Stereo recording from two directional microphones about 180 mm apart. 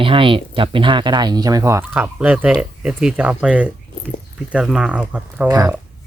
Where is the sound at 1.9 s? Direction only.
5° right (ahead or behind).